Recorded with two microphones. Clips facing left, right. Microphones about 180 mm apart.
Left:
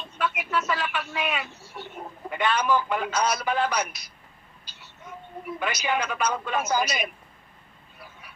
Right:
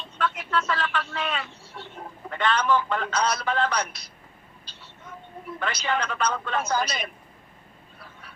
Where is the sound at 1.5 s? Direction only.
25° right (ahead or behind).